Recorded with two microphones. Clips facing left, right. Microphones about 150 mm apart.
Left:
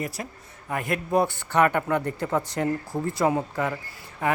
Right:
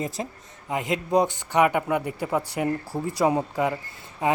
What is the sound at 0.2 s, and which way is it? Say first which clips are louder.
A man's voice: right 3 dB; 25° right (ahead or behind).